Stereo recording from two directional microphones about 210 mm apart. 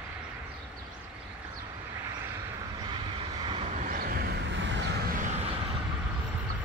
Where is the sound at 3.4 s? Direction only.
20° right (ahead or behind).